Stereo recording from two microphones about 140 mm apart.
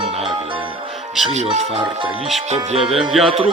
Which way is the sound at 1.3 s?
55° right (ahead or behind).